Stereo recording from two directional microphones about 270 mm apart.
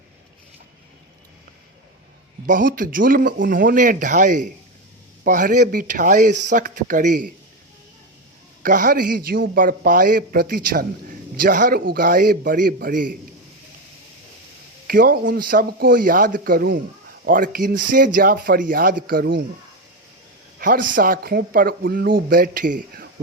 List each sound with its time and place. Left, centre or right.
2.5 s speech: right
8.6 s a man's voice: right
14.8 s a man's voice: right
20.6 s a man's voice: right